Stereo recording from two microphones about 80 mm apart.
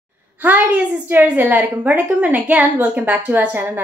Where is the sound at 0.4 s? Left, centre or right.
Right.